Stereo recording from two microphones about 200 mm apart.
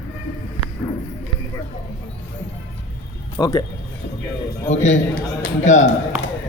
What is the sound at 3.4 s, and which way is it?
Speech, 20° left (ahead or behind).